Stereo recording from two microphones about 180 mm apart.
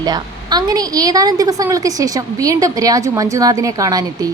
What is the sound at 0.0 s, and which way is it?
Speech, 20° right (ahead or behind).